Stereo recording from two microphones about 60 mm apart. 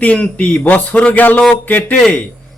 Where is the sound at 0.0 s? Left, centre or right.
Left.